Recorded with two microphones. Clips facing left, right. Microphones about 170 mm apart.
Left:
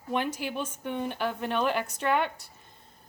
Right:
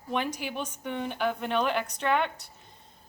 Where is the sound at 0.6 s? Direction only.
10° left (ahead or behind).